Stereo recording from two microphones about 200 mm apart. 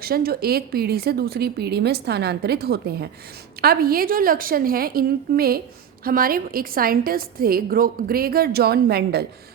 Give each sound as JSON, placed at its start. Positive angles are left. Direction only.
{"t": 0.0, "sound": "a woman's voice", "side_deg": -50}